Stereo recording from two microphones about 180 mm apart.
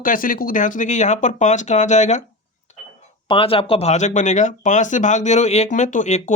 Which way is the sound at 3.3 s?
30° left (ahead or behind).